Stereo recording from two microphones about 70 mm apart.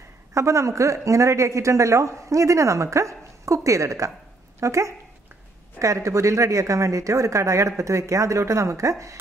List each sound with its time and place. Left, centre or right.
0.3 s speech: right